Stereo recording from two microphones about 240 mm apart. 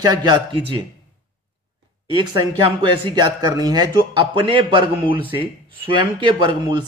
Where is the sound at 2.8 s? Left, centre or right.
Right.